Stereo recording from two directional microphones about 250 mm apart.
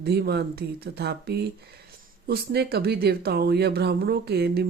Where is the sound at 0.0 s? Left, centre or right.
Right.